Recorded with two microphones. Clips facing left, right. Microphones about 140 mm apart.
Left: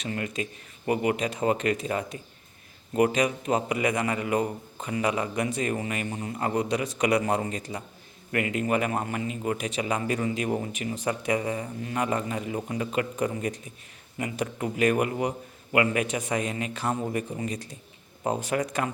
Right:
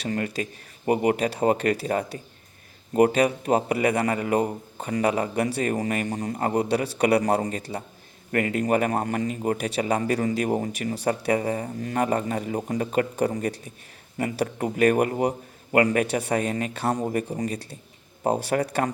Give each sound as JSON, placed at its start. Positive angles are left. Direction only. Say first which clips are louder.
{"t": 0.1, "sound": "a man's voice", "louder": "right 3 dB", "side_deg": -40}